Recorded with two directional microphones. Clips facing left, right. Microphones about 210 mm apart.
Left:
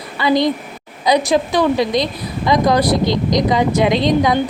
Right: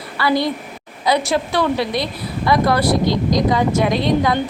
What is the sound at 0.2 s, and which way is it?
A woman's voice, 20° left (ahead or behind).